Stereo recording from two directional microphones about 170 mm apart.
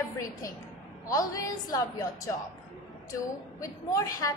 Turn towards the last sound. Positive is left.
turn(degrees=20)  # may be behind; listen again after turning